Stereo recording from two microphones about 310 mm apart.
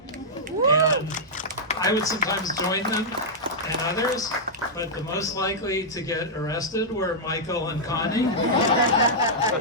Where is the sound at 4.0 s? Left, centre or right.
Centre.